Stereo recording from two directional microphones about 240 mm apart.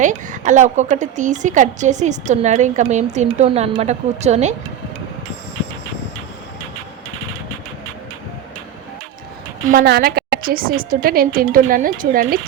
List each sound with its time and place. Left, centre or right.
0.0 s a woman's voice: right
9.6 s a woman's voice: right